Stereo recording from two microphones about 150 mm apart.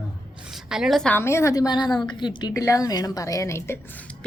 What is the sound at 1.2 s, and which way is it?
A woman's voice, 15° left (ahead or behind).